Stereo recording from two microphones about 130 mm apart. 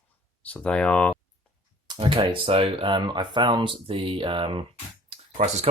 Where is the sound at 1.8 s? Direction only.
40° right (ahead or behind).